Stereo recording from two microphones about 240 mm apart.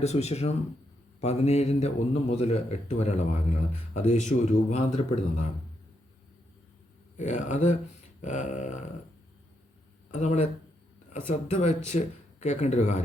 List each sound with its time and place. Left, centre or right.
0.0 s speech: left
7.2 s speech: left
10.1 s speech: left